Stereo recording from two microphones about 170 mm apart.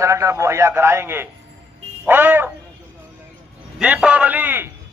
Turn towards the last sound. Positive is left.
turn(degrees=-10)  # may be behind; listen again after turning